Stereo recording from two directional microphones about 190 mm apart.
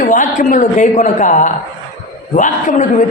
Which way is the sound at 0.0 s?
40° left (ahead or behind).